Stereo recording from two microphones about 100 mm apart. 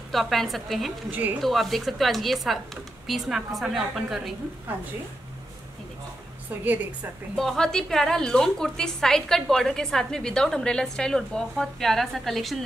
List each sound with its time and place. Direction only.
0.1 s a woman's voice: centre (ahead or behind)
6.6 s a woman's voice: 20° right (ahead or behind)
7.3 s a woman's voice: 5° left (ahead or behind)